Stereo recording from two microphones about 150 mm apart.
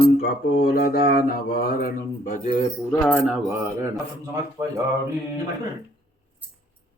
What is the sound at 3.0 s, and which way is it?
Mantra, 5° right (ahead or behind).